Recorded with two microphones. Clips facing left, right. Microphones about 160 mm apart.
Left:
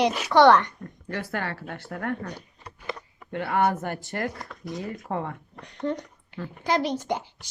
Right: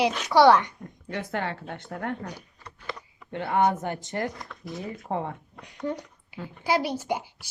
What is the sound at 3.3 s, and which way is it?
Speech, 20° right (ahead or behind).